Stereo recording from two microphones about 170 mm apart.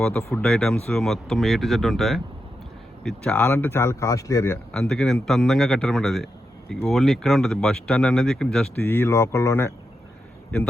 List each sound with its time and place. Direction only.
0.4 s speech: 5° left (ahead or behind); by 4.5 s 20° left (ahead or behind)
4.7 s speech: 5° left (ahead or behind)